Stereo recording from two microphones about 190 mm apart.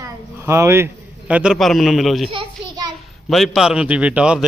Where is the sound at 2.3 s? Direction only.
25° right (ahead or behind).